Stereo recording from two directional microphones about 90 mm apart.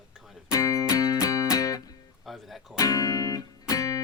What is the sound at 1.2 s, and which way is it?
Music, 40° left (ahead or behind).